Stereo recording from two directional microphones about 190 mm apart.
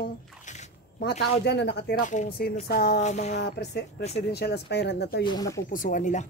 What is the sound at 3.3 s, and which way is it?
Speech, 60° left (ahead or behind).